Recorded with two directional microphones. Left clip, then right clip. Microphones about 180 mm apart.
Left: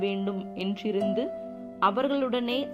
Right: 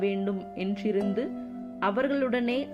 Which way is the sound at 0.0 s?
Centre (ahead or behind).